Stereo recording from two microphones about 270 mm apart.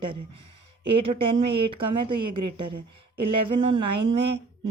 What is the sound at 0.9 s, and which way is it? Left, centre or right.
A woman's voice, right.